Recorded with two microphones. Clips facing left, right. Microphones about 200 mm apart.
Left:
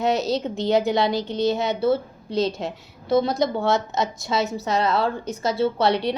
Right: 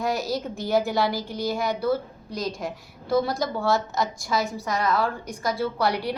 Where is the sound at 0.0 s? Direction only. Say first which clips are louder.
Left 4 dB; 20° left (ahead or behind).